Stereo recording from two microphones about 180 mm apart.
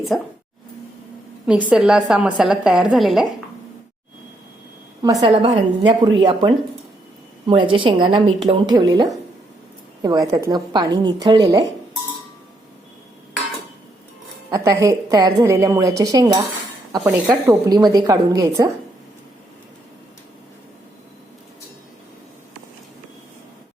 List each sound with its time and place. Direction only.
0.1 s a woman's voice: centre (ahead or behind)
1.5 s a woman's voice: 5° right (ahead or behind)
5.0 s a woman's voice: 25° right (ahead or behind)
14.5 s a woman's voice: 20° right (ahead or behind)
17.0 s a woman's voice: 5° right (ahead or behind)
17.4 s a woman's voice: 20° right (ahead or behind)